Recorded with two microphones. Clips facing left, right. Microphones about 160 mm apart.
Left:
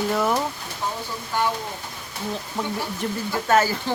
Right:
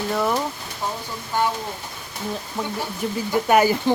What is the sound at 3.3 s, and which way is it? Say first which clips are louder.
Speech: right 3 dB; 15° right (ahead or behind).